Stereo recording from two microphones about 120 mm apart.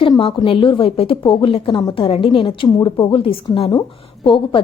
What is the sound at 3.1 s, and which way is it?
A woman's voice, 50° left (ahead or behind).